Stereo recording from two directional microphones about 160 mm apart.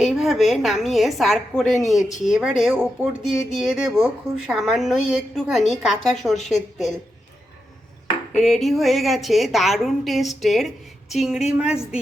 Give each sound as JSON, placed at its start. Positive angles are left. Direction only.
{"t": 0.0, "sound": "a woman's voice", "side_deg": 0}
{"t": 8.4, "sound": "a woman's voice", "side_deg": 0}